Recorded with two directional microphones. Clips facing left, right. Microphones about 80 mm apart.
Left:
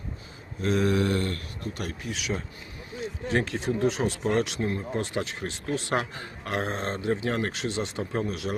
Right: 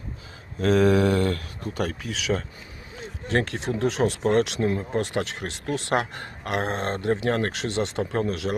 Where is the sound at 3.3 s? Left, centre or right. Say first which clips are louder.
Right 2 dB; right.